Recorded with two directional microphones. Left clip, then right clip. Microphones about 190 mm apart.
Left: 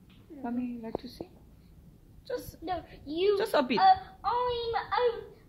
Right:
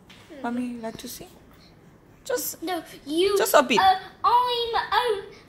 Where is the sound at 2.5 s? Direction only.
10° left (ahead or behind).